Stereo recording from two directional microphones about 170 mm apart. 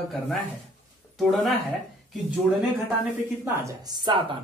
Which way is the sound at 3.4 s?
15° right (ahead or behind).